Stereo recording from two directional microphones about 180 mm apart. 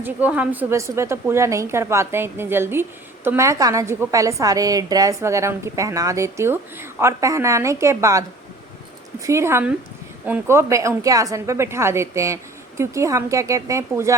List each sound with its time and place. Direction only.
0.0 s a woman's voice: 10° right (ahead or behind)
9.2 s a woman's voice: 15° right (ahead or behind)